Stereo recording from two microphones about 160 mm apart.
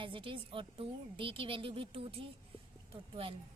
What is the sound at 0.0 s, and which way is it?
Speech, 35° right (ahead or behind).